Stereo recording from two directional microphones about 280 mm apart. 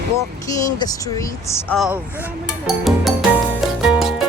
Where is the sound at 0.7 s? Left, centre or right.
Centre.